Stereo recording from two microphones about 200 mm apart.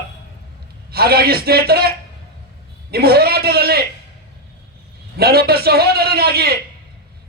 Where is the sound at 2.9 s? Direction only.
50° right (ahead or behind).